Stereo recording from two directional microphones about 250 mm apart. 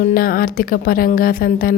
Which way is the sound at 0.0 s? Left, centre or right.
Left.